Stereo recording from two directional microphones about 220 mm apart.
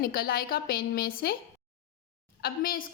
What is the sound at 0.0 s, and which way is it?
A woman's voice, 45° left (ahead or behind).